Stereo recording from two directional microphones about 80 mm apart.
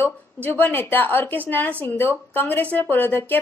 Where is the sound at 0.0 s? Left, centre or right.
Left.